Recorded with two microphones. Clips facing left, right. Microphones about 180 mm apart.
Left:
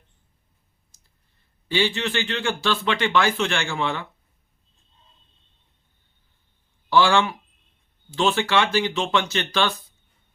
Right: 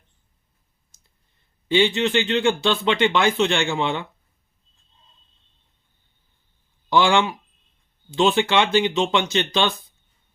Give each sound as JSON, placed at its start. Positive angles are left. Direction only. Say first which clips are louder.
{"t": 1.6, "sound": "speech", "louder": "right 5 dB", "side_deg": -20}
{"t": 6.9, "sound": "speech", "louder": "even", "side_deg": -20}